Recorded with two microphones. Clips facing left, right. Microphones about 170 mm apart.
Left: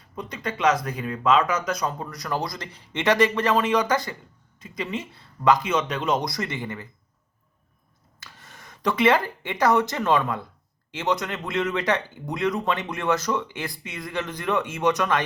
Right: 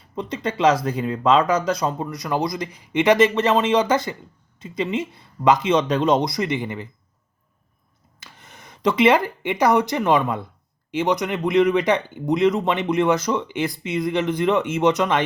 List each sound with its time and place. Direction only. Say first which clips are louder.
0.2 s speech: right 5 dB; 25° right (ahead or behind)
6.2 s speech: right 6 dB; 20° right (ahead or behind)
8.2 s speech: right 2 dB; 20° right (ahead or behind)